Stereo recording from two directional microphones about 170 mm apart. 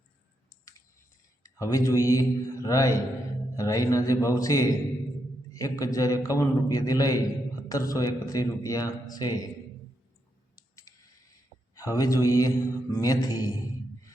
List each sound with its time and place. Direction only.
1.5 s speech: 20° left (ahead or behind)
3.5 s mantra: 20° left (ahead or behind)
10.5 s mechanisms: 20° left (ahead or behind)
11.7 s mantra: 20° left (ahead or behind)